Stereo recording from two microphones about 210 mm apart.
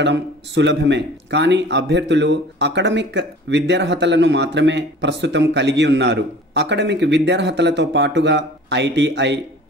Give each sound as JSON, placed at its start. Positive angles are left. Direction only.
{"t": 0.0, "sound": "a man's voice", "side_deg": -55}